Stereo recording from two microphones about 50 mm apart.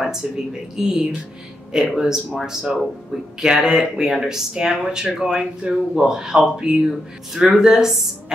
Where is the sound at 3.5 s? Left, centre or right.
Centre.